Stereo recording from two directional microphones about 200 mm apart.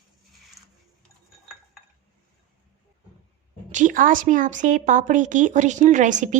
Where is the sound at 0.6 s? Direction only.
15° right (ahead or behind).